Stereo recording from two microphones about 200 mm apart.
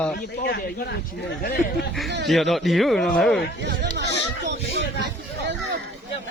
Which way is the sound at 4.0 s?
60° right (ahead or behind).